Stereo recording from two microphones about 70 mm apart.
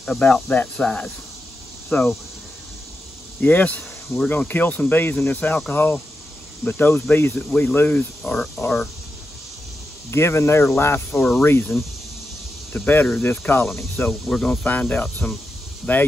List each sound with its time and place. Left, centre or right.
0.2 s speech: centre
1.9 s speech: left
3.3 s speech: left
10.1 s speech: left
12.7 s speech: left
14.2 s speech: centre
14.7 s speech: left